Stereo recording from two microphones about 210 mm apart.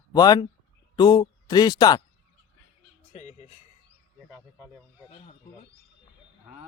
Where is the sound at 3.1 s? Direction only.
35° left (ahead or behind).